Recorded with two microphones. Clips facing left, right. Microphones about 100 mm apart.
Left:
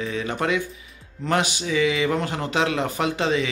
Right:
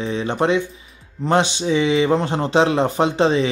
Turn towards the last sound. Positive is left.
turn(degrees=-30)  # may be behind; listen again after turning